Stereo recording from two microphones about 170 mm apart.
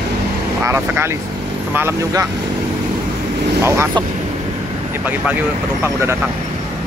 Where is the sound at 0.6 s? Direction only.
15° right (ahead or behind).